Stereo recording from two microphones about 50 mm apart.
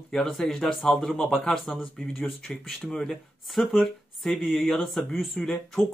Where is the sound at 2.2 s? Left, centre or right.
Centre.